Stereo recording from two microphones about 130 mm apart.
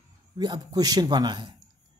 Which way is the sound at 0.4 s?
30° right (ahead or behind).